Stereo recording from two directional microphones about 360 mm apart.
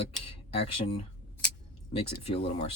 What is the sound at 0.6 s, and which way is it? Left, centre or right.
Speech, centre.